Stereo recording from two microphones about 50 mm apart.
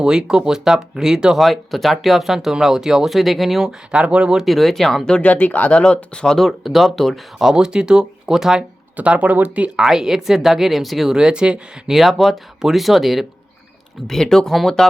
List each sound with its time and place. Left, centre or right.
0.0 s speech: centre
1.4 s speech: centre; by 4.4 s right
4.4 s speech: centre
5.2 s speech: left; by 6.5 s centre
6.6 s speech: centre
7.3 s speech: centre
9.0 s speech: right
9.7 s speech: centre
11.2 s speech: centre
11.9 s speech: centre
14.1 s speech: centre